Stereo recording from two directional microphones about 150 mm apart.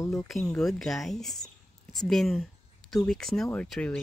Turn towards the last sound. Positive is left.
turn(degrees=5)  # may be behind; listen again after turning